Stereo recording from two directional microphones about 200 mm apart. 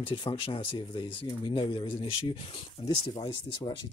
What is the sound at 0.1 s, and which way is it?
Speech, 25° left (ahead or behind).